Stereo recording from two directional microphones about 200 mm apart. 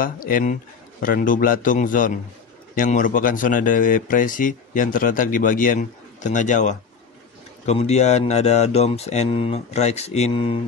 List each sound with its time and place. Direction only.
0.0 s speech: 45° left (ahead or behind); by 10.6 s 25° left (ahead or behind)